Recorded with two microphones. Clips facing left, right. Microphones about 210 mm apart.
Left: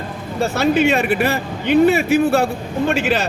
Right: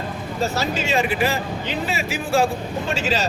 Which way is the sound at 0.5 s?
60° left (ahead or behind).